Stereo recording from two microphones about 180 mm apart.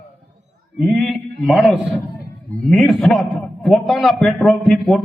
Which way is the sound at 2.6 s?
Centre (ahead or behind).